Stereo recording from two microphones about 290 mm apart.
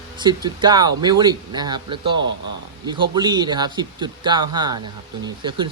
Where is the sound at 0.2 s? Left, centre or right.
Centre.